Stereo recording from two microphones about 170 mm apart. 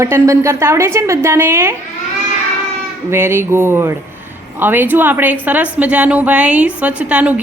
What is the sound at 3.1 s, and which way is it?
A woman's voice, 15° right (ahead or behind).